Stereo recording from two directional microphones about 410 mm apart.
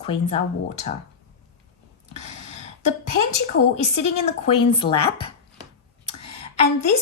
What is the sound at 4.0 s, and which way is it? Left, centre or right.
A woman's voice, centre.